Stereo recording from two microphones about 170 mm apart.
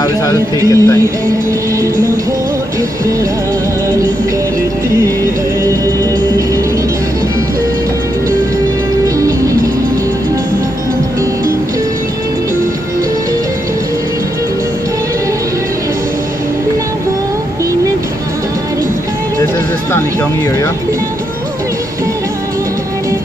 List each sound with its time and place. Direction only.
0.7 s music: 15° left (ahead or behind)
9.0 s music: 20° right (ahead or behind)